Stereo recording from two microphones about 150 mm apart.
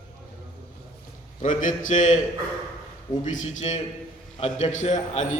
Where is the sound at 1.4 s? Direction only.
60° left (ahead or behind).